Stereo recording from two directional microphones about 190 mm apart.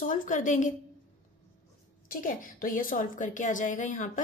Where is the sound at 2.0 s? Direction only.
45° left (ahead or behind).